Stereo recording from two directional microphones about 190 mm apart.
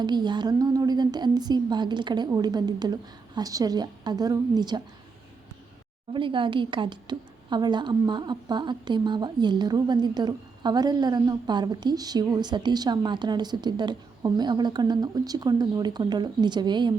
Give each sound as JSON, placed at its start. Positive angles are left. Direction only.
{"t": 0.0, "sound": "a woman's voice", "side_deg": -25}
{"t": 6.1, "sound": "a woman's voice", "side_deg": -25}